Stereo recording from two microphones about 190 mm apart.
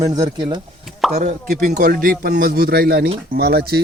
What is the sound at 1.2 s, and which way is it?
A man's voice, 40° right (ahead or behind).